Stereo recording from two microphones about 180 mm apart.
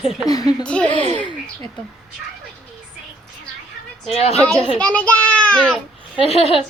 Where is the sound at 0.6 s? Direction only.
5° left (ahead or behind).